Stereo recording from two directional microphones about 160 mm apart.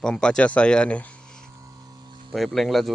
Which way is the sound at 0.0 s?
5° left (ahead or behind).